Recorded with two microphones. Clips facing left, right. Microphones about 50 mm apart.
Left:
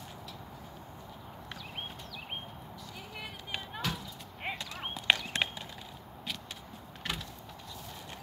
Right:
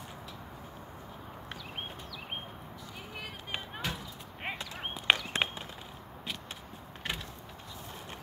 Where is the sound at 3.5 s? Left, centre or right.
Centre.